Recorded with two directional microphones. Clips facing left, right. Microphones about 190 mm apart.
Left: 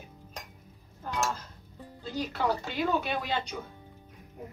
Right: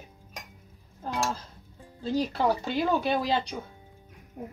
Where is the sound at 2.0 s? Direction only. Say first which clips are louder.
Right 5 dB; 30° right (ahead or behind).